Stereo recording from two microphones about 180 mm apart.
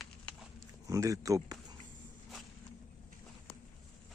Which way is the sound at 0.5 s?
20° right (ahead or behind).